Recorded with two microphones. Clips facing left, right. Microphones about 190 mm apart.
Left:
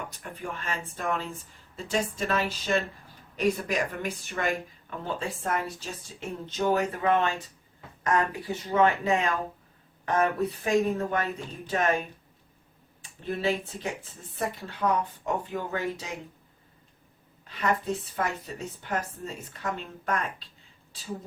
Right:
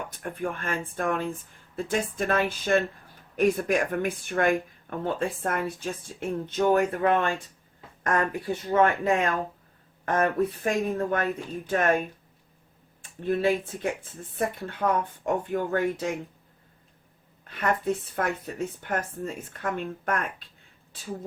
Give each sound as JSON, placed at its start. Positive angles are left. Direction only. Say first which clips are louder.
{"t": 0.2, "sound": "speech", "louder": "right 6 dB", "side_deg": -55}
{"t": 8.7, "sound": "speech", "louder": "right 1 dB", "side_deg": -55}
{"t": 13.0, "sound": "speech", "louder": "right 5 dB", "side_deg": -55}
{"t": 17.6, "sound": "speech", "louder": "right 2 dB", "side_deg": -55}